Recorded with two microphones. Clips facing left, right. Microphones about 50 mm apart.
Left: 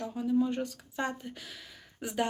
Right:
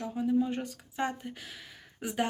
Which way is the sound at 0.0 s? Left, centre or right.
Right.